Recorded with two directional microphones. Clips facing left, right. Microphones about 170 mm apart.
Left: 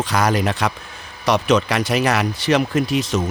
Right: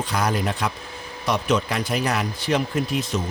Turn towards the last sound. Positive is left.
turn(degrees=90)